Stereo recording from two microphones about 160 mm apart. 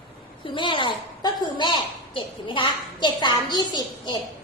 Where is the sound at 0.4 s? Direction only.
30° left (ahead or behind).